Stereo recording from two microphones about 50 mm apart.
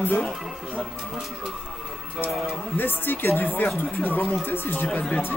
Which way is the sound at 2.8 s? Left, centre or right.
Left.